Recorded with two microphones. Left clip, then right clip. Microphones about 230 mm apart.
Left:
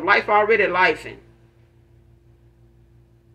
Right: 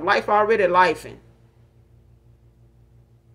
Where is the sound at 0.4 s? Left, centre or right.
Right.